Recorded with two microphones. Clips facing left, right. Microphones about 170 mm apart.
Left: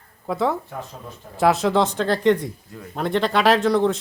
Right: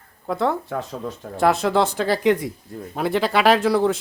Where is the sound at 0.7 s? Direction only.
85° right.